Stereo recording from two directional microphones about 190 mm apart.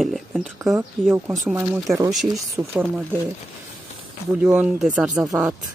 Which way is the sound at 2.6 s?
15° right (ahead or behind).